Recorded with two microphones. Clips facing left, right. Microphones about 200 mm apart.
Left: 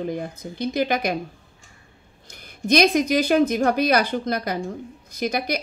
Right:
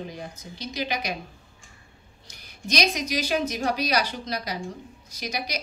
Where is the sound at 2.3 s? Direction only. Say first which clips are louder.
Left 9 dB; 55° left (ahead or behind).